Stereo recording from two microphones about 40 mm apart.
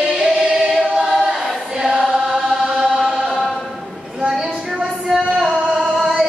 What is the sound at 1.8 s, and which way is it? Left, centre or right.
Chant, centre.